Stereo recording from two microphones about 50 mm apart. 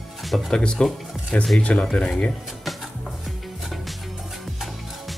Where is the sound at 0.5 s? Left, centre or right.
Centre.